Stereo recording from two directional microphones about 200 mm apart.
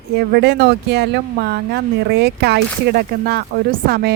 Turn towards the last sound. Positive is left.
turn(degrees=-50)  # may be behind; listen again after turning